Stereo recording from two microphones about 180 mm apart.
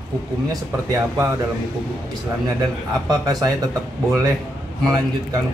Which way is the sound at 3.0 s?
20° right (ahead or behind).